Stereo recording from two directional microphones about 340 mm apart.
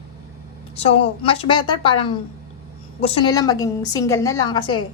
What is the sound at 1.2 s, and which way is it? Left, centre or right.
A woman's voice, centre.